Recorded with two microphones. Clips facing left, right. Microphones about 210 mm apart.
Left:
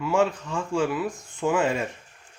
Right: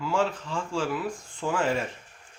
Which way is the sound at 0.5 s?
20° left (ahead or behind).